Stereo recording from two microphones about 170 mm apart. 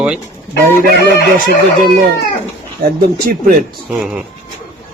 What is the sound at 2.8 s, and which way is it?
Speech, 60° right (ahead or behind).